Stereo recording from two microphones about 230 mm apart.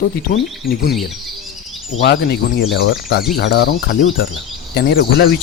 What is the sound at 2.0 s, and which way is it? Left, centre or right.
Speech, left.